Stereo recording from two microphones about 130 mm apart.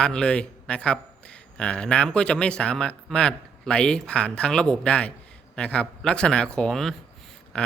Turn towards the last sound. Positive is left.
turn(degrees=10)  # may be behind; listen again after turning